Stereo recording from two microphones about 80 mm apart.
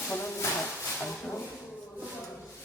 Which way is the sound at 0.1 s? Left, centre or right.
Left.